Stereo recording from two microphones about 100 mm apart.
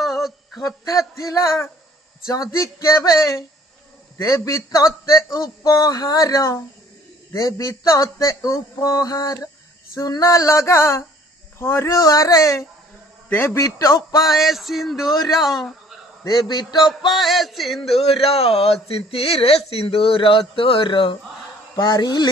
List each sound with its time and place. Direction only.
0.0 s a sound: centre (ahead or behind)
0.6 s a man's voice: 35° left (ahead or behind)
14.2 s male singing: centre (ahead or behind)
16.3 s a man's voice: 45° left (ahead or behind)
17.1 s male singing: centre (ahead or behind)
17.9 s speech: 70° left (ahead or behind); by 21.2 s 55° left (ahead or behind)
21.7 s a man's voice: 45° left (ahead or behind)